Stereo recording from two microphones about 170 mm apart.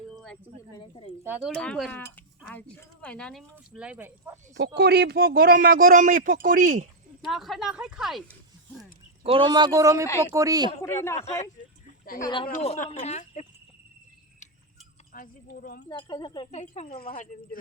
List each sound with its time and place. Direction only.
0.8 s speech: 30° left (ahead or behind)
1.5 s speech: 5° left (ahead or behind)
3.7 s speech: 5° right (ahead or behind)
4.5 s speech: 75° right (ahead or behind); by 6.8 s 50° right (ahead or behind)
7.3 s speech: centre (ahead or behind)
9.2 s speech: 30° right (ahead or behind)
10.8 s a man's voice: 15° left (ahead or behind)
12.2 s speech: 30° left (ahead or behind)
12.5 s speech: 45° left (ahead or behind)
15.1 s speech: 55° left (ahead or behind)
15.9 s speech: 25° left (ahead or behind)
16.5 s speech: 40° left (ahead or behind)
16.9 s speech: 60° left (ahead or behind)